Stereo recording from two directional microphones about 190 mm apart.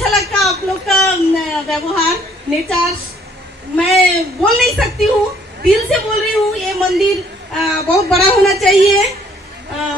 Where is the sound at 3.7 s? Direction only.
Centre (ahead or behind).